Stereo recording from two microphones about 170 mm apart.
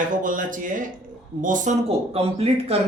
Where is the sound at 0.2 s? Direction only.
50° right (ahead or behind).